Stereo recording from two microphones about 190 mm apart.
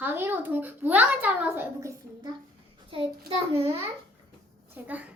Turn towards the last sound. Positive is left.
turn(degrees=-10)  # may be behind; listen again after turning